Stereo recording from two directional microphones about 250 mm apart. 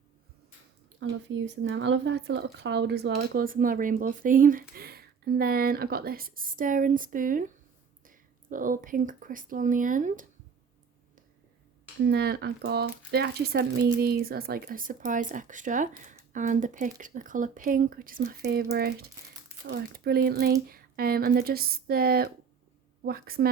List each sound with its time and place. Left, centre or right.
0.9 s speech: right
12.0 s speech: right